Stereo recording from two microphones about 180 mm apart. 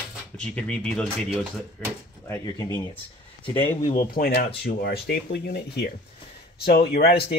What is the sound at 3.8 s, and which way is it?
Speech, 35° left (ahead or behind).